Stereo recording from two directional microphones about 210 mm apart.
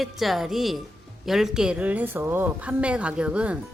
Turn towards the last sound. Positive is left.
turn(degrees=-5)  # may be behind; listen again after turning